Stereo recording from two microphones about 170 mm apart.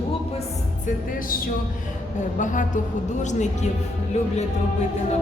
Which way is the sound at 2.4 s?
50° left (ahead or behind).